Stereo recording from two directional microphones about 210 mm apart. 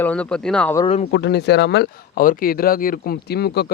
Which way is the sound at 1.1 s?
55° left (ahead or behind).